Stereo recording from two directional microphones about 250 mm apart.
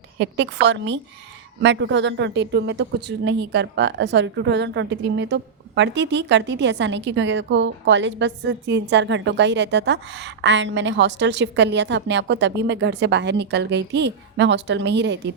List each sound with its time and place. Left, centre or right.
0.2 s speech: right